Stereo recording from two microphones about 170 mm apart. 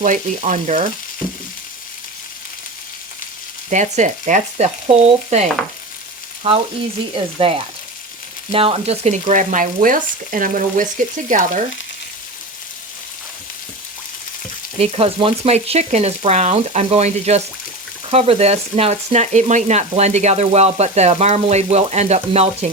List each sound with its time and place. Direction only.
0.0 s frying: 45° right (ahead or behind)
3.7 s frying: 45° right (ahead or behind)
7.1 s frying: 35° right (ahead or behind)
14.8 s frying: 35° right (ahead or behind)